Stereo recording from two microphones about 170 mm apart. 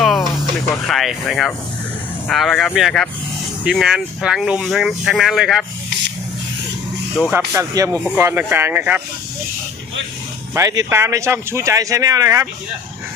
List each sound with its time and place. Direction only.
0.0 s snake: centre (ahead or behind)
0.9 s speech: centre (ahead or behind)
7.3 s speech: 15° right (ahead or behind)
10.5 s speech: 20° right (ahead or behind)